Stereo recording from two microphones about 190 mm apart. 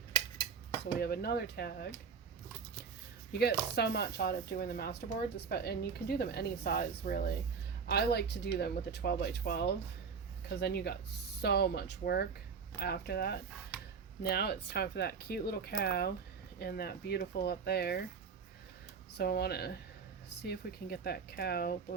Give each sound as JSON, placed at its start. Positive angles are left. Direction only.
{"t": 0.9, "sound": "speech", "side_deg": 55}
{"t": 3.3, "sound": "speech", "side_deg": 55}
{"t": 7.9, "sound": "speech", "side_deg": 60}
{"t": 19.1, "sound": "speech", "side_deg": 60}